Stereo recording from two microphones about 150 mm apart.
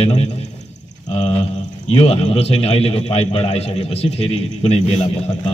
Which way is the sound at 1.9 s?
40° left (ahead or behind).